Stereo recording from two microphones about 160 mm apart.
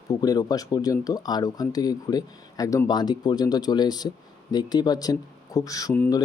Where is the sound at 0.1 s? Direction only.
25° left (ahead or behind).